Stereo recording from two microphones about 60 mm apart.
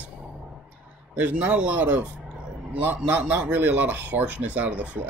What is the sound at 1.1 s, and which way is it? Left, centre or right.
Speech, right.